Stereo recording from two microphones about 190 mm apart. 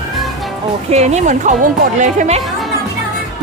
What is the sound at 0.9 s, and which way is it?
Speech, 35° right (ahead or behind).